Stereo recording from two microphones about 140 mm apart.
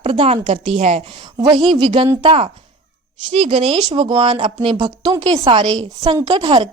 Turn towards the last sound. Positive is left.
turn(degrees=-35)  # may be behind; listen again after turning